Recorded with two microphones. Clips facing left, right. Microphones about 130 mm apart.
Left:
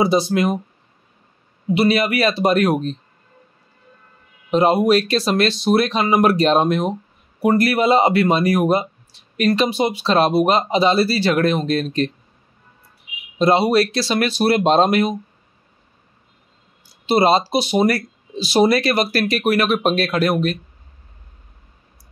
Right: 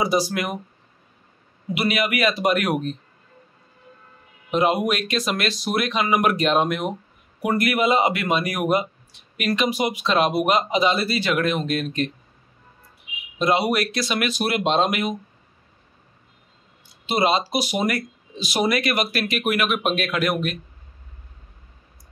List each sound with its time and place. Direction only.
0.0 s speech: 25° left (ahead or behind)
1.7 s speech: 30° left (ahead or behind)
4.5 s speech: 35° left (ahead or behind)
13.4 s speech: 30° left (ahead or behind)
16.8 s speech: 35° left (ahead or behind)